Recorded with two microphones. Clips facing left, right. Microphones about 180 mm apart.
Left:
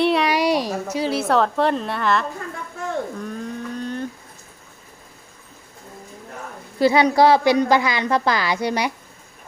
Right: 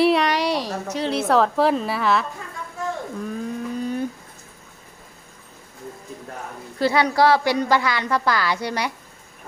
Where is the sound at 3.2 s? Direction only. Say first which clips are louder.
Right 1 dB; 5° right (ahead or behind).